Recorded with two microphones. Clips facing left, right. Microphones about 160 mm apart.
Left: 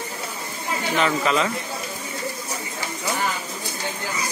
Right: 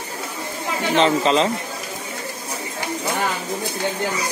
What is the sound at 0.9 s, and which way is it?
Speech, 30° right (ahead or behind).